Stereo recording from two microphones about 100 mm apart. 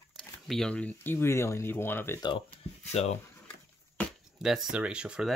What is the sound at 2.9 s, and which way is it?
Speech, 90° left.